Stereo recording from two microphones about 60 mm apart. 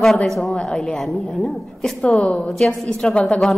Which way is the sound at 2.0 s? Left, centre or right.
Centre.